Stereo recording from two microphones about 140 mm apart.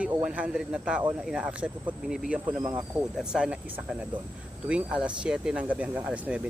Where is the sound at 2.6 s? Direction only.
30° right (ahead or behind).